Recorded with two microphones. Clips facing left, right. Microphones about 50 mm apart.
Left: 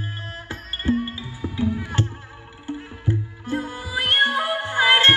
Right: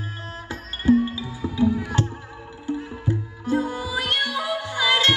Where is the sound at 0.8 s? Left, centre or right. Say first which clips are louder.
Right 5 dB; left.